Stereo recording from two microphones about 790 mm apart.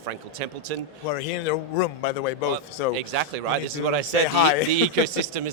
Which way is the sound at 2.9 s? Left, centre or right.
Right.